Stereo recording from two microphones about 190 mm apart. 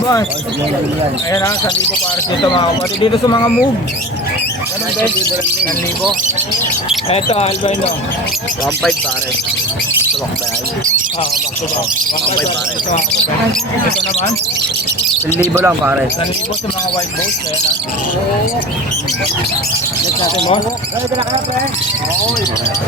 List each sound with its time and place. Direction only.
1.3 s speech: 15° left (ahead or behind)
7.1 s speech: 30° left (ahead or behind)
15.6 s speech: 10° right (ahead or behind)